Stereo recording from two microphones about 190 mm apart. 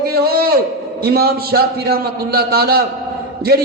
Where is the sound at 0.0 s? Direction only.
55° right (ahead or behind).